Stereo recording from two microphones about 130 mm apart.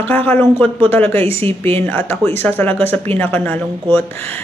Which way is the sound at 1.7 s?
15° left (ahead or behind).